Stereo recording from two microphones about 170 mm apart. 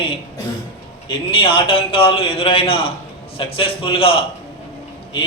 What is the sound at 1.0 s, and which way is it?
A man's voice, 30° left (ahead or behind).